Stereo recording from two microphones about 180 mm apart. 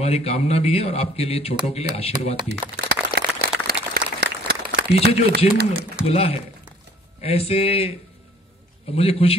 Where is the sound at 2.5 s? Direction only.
65° right (ahead or behind).